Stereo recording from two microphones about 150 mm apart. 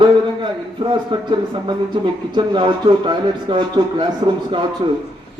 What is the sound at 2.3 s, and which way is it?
A man's voice, 30° right (ahead or behind).